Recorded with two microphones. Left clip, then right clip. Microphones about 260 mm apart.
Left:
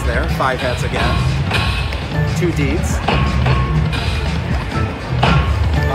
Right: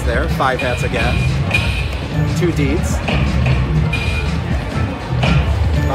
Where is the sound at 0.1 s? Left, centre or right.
Centre.